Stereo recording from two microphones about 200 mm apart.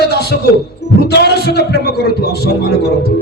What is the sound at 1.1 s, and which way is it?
A man's voice, 55° left (ahead or behind).